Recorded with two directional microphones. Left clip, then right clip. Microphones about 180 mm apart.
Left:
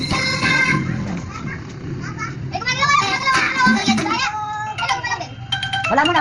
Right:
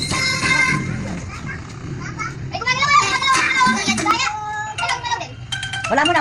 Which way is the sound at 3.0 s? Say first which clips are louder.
Right 1 dB; 35° left (ahead or behind).